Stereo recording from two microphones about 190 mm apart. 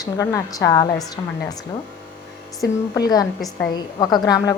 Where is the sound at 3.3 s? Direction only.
Centre (ahead or behind).